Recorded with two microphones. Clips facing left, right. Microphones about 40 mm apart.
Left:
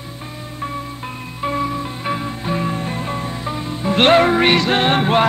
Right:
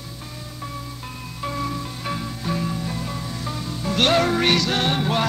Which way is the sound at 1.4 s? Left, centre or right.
Left.